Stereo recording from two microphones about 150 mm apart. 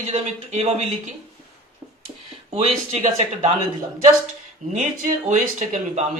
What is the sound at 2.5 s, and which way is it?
Speech, 45° right (ahead or behind).